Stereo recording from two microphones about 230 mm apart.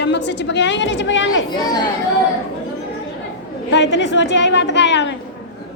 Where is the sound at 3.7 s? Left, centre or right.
Left.